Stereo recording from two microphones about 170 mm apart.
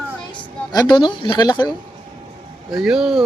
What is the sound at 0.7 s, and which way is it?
Speech, 25° left (ahead or behind).